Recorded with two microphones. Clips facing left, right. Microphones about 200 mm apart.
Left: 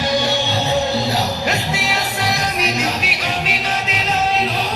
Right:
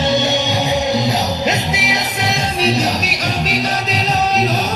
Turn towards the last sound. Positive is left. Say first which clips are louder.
# right 3 dB
turn(degrees=-40)  # may be behind; listen again after turning